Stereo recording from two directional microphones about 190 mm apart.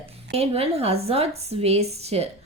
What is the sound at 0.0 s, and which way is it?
Speech, 30° right (ahead or behind).